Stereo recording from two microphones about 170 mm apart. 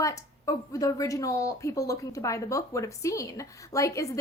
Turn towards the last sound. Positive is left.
turn(degrees=20)  # may be behind; listen again after turning